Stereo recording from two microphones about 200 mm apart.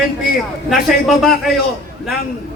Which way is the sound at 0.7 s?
Centre (ahead or behind).